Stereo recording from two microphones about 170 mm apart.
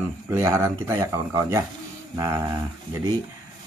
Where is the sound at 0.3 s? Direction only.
15° right (ahead or behind).